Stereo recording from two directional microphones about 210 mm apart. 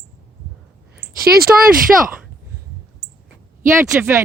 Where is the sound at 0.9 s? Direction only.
45° right (ahead or behind).